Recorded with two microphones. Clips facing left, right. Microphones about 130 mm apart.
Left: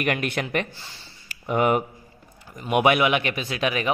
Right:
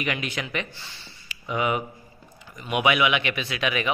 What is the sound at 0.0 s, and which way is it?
A man's voice, 55° left (ahead or behind).